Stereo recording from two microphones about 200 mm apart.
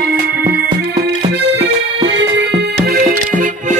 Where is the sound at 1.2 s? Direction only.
55° right (ahead or behind).